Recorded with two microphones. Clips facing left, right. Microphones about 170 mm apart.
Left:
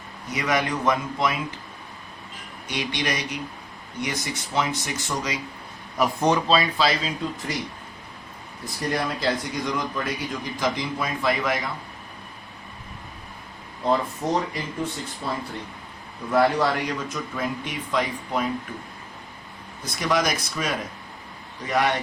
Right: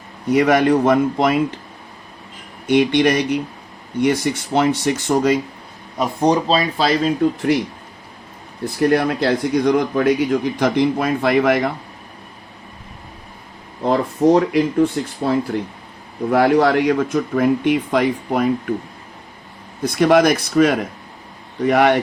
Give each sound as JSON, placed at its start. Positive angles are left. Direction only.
{"t": 0.3, "sound": "speech", "side_deg": -55}
{"t": 2.6, "sound": "speech", "side_deg": -55}
{"t": 6.0, "sound": "speech", "side_deg": -30}
{"t": 8.6, "sound": "speech", "side_deg": -60}
{"t": 13.9, "sound": "speech", "side_deg": -70}
{"t": 19.8, "sound": "speech", "side_deg": -55}